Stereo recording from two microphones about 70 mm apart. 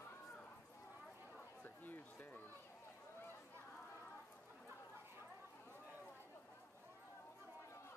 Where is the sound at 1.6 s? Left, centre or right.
Left.